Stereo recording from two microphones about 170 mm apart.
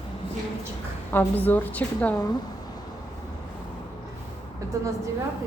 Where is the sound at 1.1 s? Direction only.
10° left (ahead or behind).